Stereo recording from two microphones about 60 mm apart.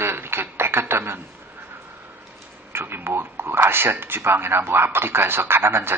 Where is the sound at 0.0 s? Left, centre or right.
Right.